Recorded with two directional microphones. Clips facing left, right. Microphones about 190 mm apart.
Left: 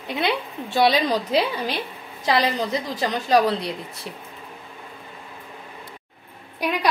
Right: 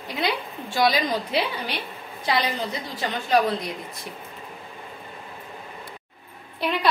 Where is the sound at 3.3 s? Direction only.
35° left (ahead or behind).